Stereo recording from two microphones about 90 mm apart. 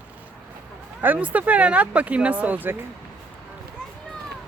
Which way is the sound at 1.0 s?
20° right (ahead or behind).